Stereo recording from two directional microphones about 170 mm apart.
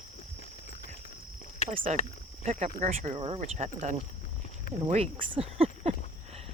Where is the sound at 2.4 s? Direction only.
45° right (ahead or behind).